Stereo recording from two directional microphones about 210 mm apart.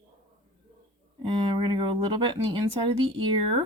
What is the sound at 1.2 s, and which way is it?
Speech, 25° right (ahead or behind).